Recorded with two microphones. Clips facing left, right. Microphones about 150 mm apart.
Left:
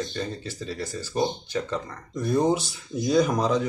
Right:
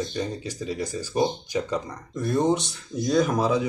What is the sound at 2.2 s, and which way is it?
Speech, centre (ahead or behind).